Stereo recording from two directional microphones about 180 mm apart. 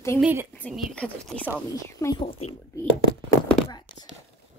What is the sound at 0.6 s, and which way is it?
Speech, centre (ahead or behind).